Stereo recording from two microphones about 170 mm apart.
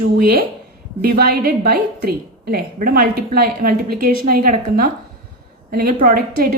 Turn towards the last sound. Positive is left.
turn(degrees=-55)  # may be behind; listen again after turning